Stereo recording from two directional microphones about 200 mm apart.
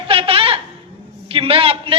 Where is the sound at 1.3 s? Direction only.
30° right (ahead or behind).